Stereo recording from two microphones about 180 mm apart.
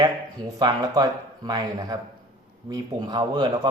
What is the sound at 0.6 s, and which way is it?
Speech, 20° right (ahead or behind).